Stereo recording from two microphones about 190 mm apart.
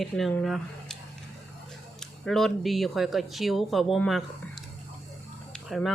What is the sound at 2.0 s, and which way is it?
Speech, centre (ahead or behind).